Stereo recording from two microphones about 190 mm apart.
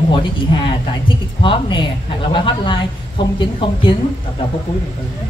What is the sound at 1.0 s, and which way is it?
A woman's voice, 25° left (ahead or behind).